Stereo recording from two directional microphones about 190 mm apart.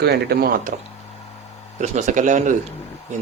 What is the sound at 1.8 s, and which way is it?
Speech, 40° right (ahead or behind).